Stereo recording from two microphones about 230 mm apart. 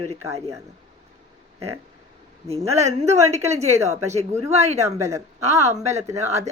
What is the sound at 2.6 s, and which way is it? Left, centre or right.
Speech, centre.